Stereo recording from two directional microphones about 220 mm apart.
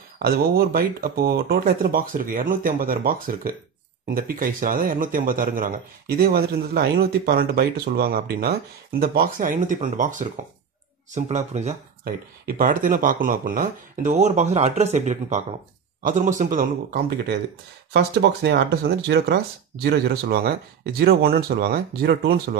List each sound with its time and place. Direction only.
0.2 s a man's voice: 45° right (ahead or behind)
12.0 s a man's voice: 40° right (ahead or behind)